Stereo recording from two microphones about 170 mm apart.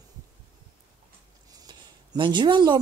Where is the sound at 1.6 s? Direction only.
25° right (ahead or behind).